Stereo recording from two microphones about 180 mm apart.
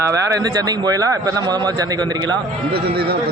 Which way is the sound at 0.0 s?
20° right (ahead or behind).